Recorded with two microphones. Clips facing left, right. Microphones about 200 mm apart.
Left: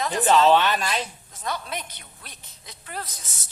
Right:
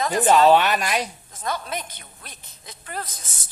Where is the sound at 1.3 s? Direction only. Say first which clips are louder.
Right 2 dB; 50° right (ahead or behind).